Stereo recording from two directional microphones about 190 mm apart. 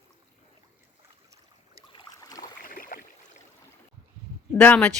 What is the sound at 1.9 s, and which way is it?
Boat, 25° left (ahead or behind).